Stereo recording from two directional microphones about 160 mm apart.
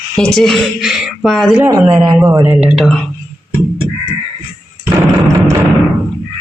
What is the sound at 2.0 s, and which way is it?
Speech, 20° right (ahead or behind).